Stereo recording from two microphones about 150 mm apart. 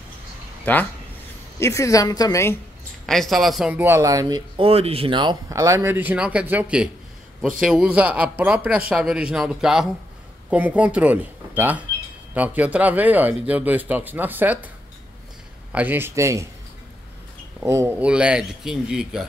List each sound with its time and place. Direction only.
0.7 s a woman's voice: 10° left (ahead or behind)
3.1 s a man's voice: centre (ahead or behind)
3.8 s speech: 20° right (ahead or behind)
4.6 s speech: 40° right (ahead or behind); by 14.7 s 10° right (ahead or behind)
15.7 s speech: 10° right (ahead or behind)
17.6 s speech: 15° right (ahead or behind)